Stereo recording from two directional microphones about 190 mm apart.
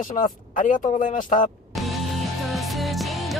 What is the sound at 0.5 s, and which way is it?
Speech, 45° left (ahead or behind).